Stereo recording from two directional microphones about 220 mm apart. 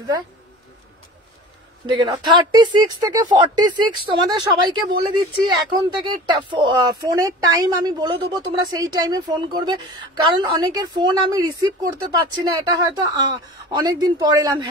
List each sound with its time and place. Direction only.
1.9 s speech: 20° right (ahead or behind)